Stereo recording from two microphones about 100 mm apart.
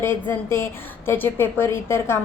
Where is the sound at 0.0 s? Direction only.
25° left (ahead or behind).